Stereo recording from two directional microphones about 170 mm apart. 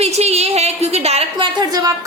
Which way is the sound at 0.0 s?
40° right (ahead or behind).